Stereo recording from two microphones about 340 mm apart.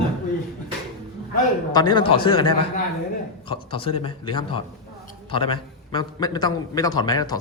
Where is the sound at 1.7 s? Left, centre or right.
Centre.